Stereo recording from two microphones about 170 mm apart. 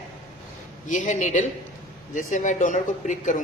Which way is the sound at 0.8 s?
45° left (ahead or behind).